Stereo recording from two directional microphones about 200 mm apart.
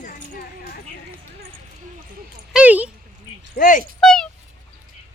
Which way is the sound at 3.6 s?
40° left (ahead or behind).